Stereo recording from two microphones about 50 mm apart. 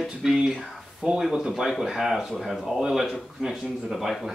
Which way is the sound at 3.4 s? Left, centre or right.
Centre.